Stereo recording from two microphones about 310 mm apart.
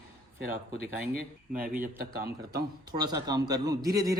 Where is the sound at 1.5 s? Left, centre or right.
Right.